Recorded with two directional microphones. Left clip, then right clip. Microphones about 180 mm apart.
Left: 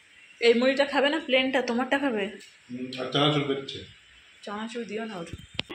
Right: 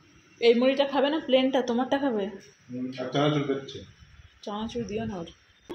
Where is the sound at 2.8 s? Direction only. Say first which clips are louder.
Left 1 dB; 5° right (ahead or behind).